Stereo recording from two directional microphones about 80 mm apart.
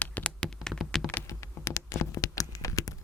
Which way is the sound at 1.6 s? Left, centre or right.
Left.